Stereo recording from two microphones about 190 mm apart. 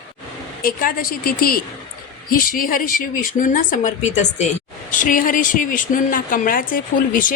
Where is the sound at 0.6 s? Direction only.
50° left (ahead or behind).